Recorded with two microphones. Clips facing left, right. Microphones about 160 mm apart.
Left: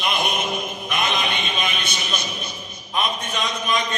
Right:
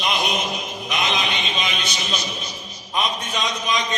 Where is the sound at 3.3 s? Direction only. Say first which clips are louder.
Even; 55° left (ahead or behind).